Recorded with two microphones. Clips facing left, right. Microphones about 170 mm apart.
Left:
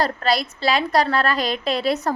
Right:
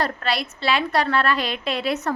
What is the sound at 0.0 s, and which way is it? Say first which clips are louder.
A woman's voice: left 4 dB; 35° left (ahead or behind).